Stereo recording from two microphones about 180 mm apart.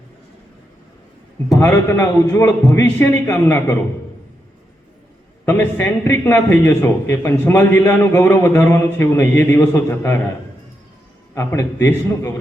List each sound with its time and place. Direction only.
1.5 s a man's voice: 15° left (ahead or behind)
5.5 s a man's voice: 10° left (ahead or behind)
11.3 s a man's voice: 15° left (ahead or behind)